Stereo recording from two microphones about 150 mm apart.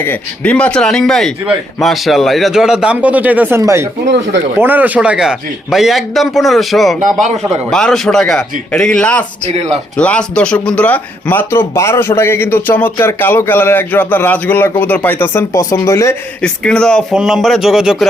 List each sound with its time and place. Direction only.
0.0 s a man's voice: 10° left (ahead or behind)
7.0 s speech: 55° right (ahead or behind)
7.7 s a man's voice: 5° left (ahead or behind); by 16.1 s 20° left (ahead or behind)
16.4 s a man's voice: 5° left (ahead or behind)